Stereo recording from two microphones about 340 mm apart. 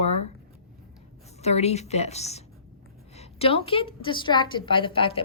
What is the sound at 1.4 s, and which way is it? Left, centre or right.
A woman's voice, centre.